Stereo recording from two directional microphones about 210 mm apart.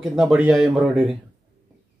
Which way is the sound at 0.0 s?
Centre (ahead or behind).